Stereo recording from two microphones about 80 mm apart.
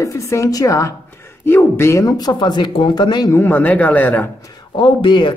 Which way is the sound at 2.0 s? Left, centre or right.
Left.